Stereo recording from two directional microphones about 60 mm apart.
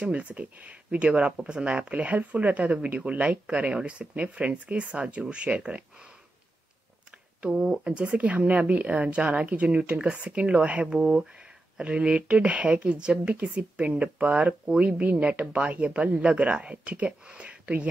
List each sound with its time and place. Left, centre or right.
0.0 s speech: right
7.4 s speech: centre